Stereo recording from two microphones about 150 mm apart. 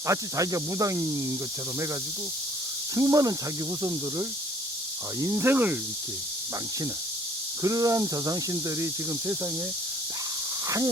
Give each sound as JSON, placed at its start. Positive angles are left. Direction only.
{"t": 0.1, "sound": "cricket", "side_deg": -25}
{"t": 2.9, "sound": "cricket", "side_deg": -20}
{"t": 5.2, "sound": "speech", "side_deg": -20}
{"t": 7.6, "sound": "cricket", "side_deg": -20}
{"t": 10.7, "sound": "speech", "side_deg": -20}